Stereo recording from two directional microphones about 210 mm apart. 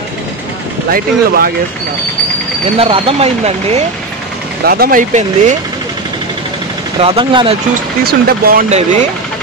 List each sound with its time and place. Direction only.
0.9 s speech: 45° right (ahead or behind)
2.8 s speech: 25° right (ahead or behind)
4.6 s speech: 45° right (ahead or behind)
7.0 s speech: 25° right (ahead or behind)
8.0 s speech: 45° right (ahead or behind)